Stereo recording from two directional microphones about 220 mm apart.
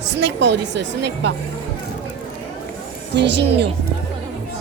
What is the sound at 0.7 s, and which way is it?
Speech, 50° right (ahead or behind).